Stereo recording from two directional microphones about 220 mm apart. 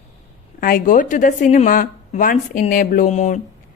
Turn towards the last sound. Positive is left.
turn(degrees=30)  # may be behind; listen again after turning